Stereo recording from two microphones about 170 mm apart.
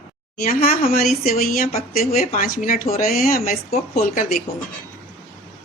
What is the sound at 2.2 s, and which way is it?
Speech, 60° left (ahead or behind).